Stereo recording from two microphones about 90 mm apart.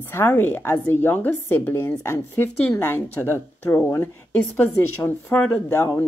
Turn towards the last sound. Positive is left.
turn(degrees=30)  # may be behind; listen again after turning